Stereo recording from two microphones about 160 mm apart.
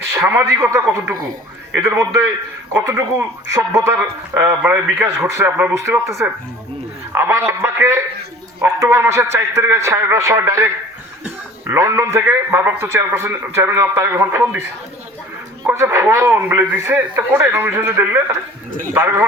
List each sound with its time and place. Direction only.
0.1 s a man's voice: 15° right (ahead or behind)
15.7 s a man's voice: 20° right (ahead or behind)